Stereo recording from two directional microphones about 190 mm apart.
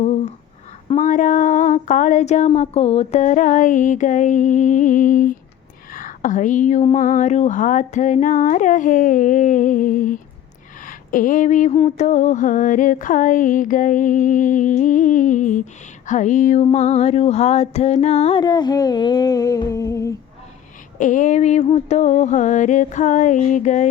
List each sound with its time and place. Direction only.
0.0 s a sound: 35° left (ahead or behind)
0.9 s speech: 40° left (ahead or behind)
11.8 s mantra: 35° left (ahead or behind)
16.0 s speech: 40° left (ahead or behind)
16.7 s music: 35° left (ahead or behind); by 20.1 s 15° left (ahead or behind)
21.0 s speech: 40° left (ahead or behind)